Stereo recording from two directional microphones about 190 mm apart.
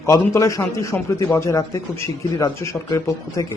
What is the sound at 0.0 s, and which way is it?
A man's voice, 15° left (ahead or behind).